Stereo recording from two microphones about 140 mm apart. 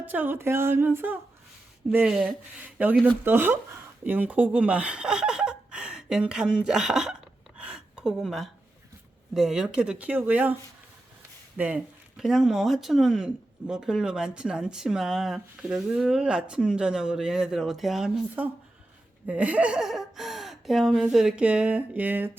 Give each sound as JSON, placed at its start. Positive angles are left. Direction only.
{"t": 0.0, "sound": "a woman's voice", "side_deg": -10}
{"t": 7.6, "sound": "a sound", "side_deg": -5}
{"t": 9.3, "sound": "a woman's voice", "side_deg": -5}
{"t": 11.5, "sound": "speech", "side_deg": -10}